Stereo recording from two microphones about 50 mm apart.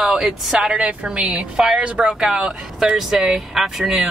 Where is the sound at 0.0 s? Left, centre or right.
Centre.